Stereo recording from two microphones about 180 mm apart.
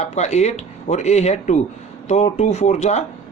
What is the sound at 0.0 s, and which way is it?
Speech, 40° left (ahead or behind).